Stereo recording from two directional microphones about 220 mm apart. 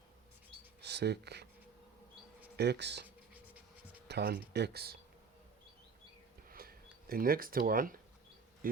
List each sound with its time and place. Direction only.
0.8 s speech: 50° right (ahead or behind)
2.6 s speech: 50° right (ahead or behind)
3.3 s scratch: 5° right (ahead or behind)
4.1 s speech: 45° right (ahead or behind)
6.5 s a sound: 40° right (ahead or behind)
8.6 s a man's voice: 40° right (ahead or behind)